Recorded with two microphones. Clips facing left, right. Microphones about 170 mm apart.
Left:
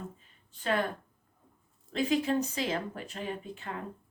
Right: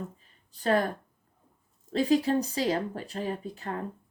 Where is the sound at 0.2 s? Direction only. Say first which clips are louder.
Right 5 dB; 40° right (ahead or behind).